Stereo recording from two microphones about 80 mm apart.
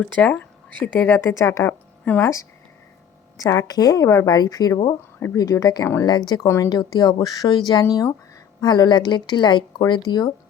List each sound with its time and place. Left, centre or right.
0.0 s a woman's voice: centre
1.3 s a woman's voice: left
6.1 s speech: left
6.4 s speech: left
6.7 s a woman's voice: left